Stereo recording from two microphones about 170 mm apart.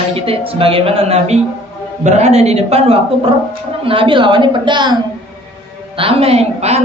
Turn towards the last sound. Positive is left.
turn(degrees=-40)  # may be behind; listen again after turning